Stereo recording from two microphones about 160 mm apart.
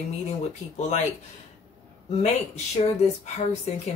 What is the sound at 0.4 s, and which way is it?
Speech, 45° left (ahead or behind).